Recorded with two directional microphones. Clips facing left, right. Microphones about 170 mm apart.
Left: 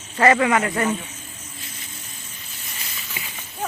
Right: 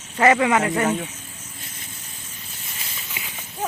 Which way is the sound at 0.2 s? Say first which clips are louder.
Even; 15° right (ahead or behind).